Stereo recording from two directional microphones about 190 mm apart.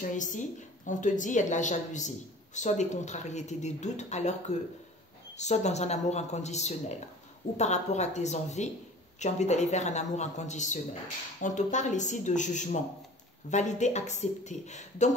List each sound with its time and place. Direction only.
0.0 s a woman's voice: 40° left (ahead or behind)